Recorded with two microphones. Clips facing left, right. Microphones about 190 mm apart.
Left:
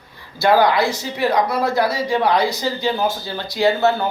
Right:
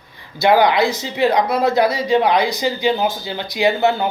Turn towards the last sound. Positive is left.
turn(degrees=-15)  # may be behind; listen again after turning